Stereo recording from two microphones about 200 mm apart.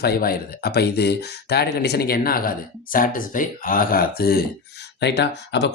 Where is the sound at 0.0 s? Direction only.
50° left (ahead or behind).